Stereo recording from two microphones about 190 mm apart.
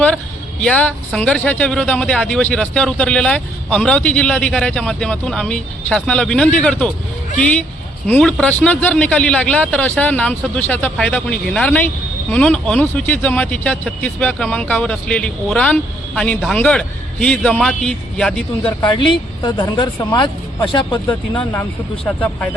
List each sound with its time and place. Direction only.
0.6 s speech: 5° left (ahead or behind)
8.0 s a man's voice: 10° left (ahead or behind)
18.8 s speech: 25° left (ahead or behind)
21.3 s a man's voice: 10° left (ahead or behind)